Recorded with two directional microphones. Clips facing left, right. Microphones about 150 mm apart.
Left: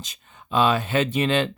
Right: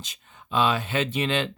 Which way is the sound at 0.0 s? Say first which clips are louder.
Left 2 dB; 40° left (ahead or behind).